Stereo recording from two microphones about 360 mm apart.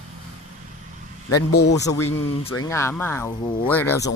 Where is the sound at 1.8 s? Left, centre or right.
Centre.